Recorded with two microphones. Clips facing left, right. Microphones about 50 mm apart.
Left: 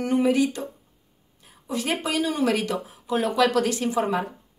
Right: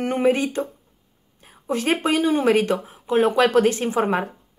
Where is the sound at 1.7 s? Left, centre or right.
Right.